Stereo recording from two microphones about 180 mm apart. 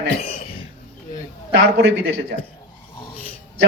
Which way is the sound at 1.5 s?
80° right.